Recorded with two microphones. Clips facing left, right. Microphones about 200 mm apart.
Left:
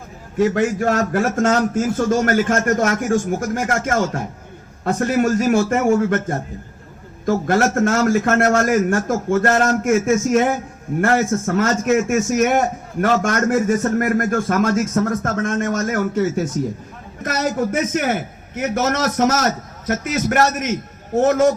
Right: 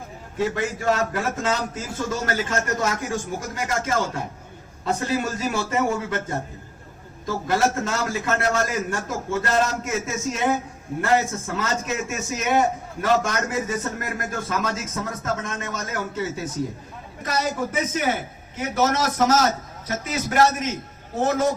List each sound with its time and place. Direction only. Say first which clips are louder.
0.5 s a man's voice: left 6 dB; 60° left (ahead or behind)
4.9 s a man's voice: left 11 dB; 55° left (ahead or behind)